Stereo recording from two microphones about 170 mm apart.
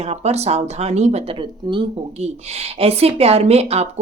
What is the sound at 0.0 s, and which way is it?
Speech, 40° right (ahead or behind).